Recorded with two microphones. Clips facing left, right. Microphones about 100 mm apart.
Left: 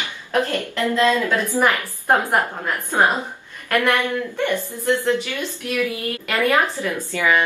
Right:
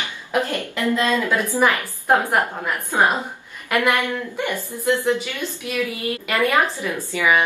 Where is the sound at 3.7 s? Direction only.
15° right (ahead or behind).